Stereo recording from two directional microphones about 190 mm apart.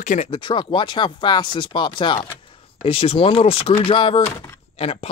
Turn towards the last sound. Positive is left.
turn(degrees=30)  # may be behind; listen again after turning